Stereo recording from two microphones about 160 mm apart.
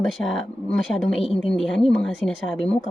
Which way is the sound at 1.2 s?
35° left (ahead or behind).